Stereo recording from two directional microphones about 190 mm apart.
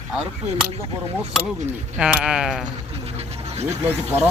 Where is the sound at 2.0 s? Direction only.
5° right (ahead or behind).